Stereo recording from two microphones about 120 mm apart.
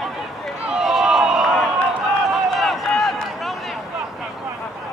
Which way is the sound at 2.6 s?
Centre (ahead or behind).